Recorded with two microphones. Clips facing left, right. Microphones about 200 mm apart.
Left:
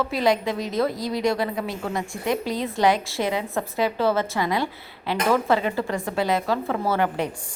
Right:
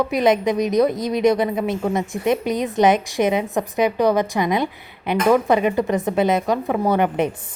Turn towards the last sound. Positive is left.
turn(degrees=-20)  # may be behind; listen again after turning